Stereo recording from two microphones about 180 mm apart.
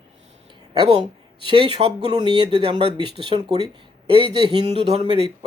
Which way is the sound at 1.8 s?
30° right (ahead or behind).